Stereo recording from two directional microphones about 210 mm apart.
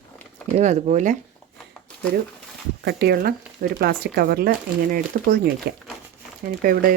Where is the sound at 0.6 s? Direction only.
35° right (ahead or behind).